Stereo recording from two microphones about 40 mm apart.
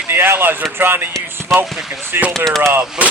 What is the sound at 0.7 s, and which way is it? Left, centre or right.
Speech, right.